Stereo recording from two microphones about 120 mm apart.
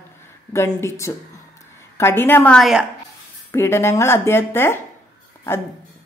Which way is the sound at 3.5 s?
20° left (ahead or behind).